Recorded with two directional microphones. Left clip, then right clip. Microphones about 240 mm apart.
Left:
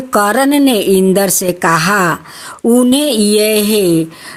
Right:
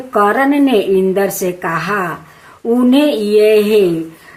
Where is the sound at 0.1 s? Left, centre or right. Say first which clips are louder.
Left 1 dB; left.